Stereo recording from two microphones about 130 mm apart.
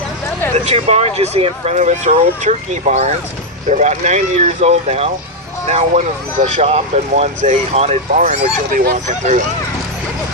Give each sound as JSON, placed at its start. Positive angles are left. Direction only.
{"t": 0.5, "sound": "speech", "side_deg": -55}
{"t": 8.7, "sound": "speech", "side_deg": -85}